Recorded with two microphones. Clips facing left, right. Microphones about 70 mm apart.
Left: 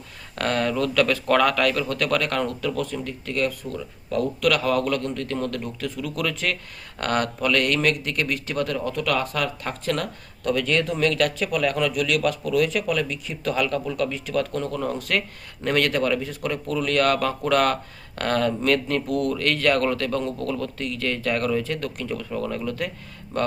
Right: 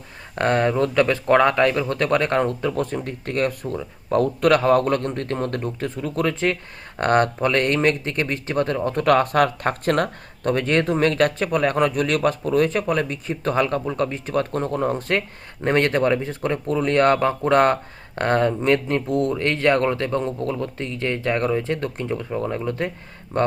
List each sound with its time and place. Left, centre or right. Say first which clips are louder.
0.3 s speech: right 4 dB; right